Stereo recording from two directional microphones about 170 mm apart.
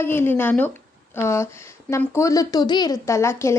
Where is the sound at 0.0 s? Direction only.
15° left (ahead or behind).